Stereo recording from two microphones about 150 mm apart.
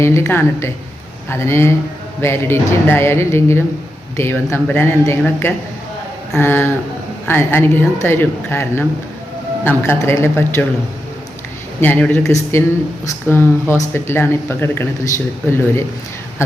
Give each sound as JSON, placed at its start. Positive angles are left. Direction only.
{"t": 0.0, "sound": "a woman's voice", "side_deg": 15}
{"t": 11.8, "sound": "a woman's voice", "side_deg": 10}